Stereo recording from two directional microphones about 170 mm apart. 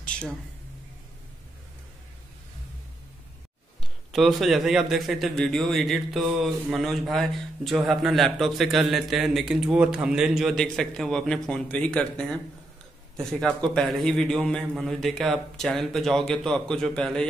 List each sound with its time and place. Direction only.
3.8 s a man's voice: centre (ahead or behind)